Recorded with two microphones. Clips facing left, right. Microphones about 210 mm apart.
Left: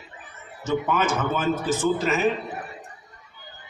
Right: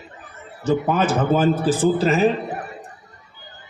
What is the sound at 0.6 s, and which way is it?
A man's voice, 35° right (ahead or behind).